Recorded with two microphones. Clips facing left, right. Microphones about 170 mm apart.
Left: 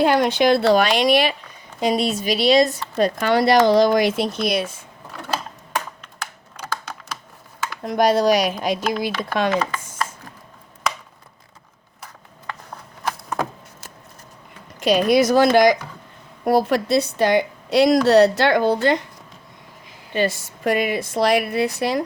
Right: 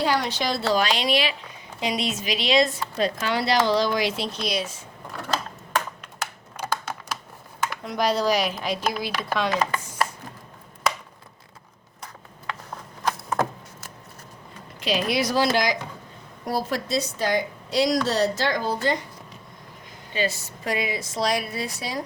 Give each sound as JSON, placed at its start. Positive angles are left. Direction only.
{"t": 0.0, "sound": "a woman's voice", "side_deg": 55}
{"t": 1.8, "sound": "a woman's voice", "side_deg": 40}
{"t": 3.2, "sound": "speech", "side_deg": 55}
{"t": 7.9, "sound": "speech", "side_deg": 50}
{"t": 14.8, "sound": "speech", "side_deg": 45}
{"t": 16.4, "sound": "a woman's voice", "side_deg": 65}
{"t": 20.1, "sound": "a woman's voice", "side_deg": 55}